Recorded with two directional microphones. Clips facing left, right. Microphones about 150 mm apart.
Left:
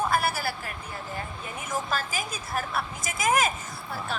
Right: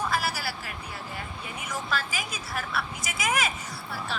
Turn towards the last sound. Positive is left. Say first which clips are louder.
# left 1 dB
turn(degrees=50)  # may be behind; listen again after turning